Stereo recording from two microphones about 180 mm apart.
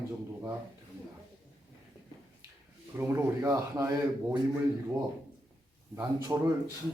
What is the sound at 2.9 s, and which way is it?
Speech, 15° right (ahead or behind).